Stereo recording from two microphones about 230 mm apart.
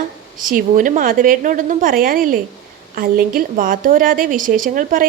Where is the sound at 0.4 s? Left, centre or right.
Right.